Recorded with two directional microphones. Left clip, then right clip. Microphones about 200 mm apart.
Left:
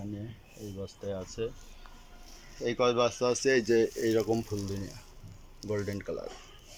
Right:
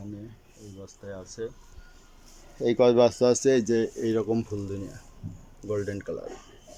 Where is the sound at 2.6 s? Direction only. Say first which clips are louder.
Right 7 dB; 25° right (ahead or behind).